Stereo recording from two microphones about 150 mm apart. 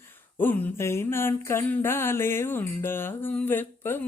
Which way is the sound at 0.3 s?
15° left (ahead or behind).